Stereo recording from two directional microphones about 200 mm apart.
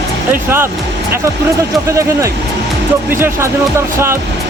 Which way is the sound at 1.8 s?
15° right (ahead or behind).